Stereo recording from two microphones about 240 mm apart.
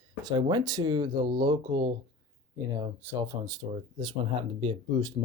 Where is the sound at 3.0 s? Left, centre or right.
Centre.